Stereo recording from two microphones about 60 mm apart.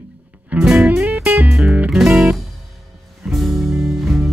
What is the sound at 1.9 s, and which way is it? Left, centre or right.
Music, centre.